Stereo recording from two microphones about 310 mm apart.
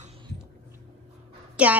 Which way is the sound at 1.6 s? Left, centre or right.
Centre.